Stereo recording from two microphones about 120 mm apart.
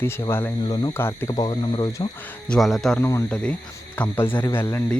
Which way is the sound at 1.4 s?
40° left (ahead or behind).